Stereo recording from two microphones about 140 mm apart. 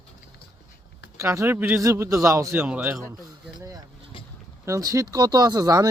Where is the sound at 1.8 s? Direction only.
25° right (ahead or behind).